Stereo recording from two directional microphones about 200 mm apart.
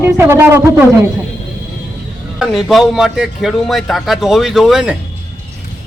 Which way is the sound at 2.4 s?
Centre (ahead or behind).